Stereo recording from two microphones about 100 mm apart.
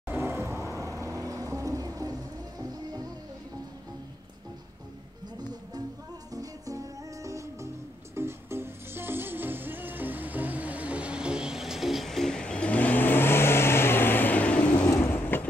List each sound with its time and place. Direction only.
0.1 s vehicle: 25° right (ahead or behind)
2.6 s music: 40° right (ahead or behind)
6.3 s music: 35° right (ahead or behind); by 14.9 s 15° left (ahead or behind)
14.9 s vehicle: 25° left (ahead or behind)